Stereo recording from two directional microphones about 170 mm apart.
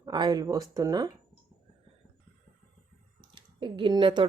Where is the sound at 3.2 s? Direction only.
30° right (ahead or behind).